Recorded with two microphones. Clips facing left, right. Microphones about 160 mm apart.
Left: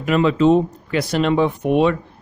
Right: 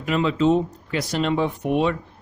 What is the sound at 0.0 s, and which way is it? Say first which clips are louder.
Speech: left 5 dB; 60° left (ahead or behind).